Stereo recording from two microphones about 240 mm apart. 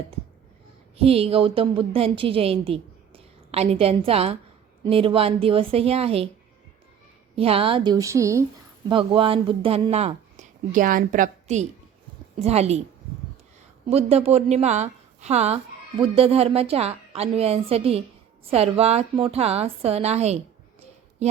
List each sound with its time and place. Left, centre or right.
0.9 s a woman's voice: right
7.3 s a woman's voice: right
13.9 s a woman's voice: right